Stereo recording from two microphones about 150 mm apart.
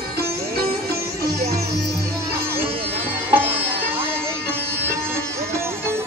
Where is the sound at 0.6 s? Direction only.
90° right.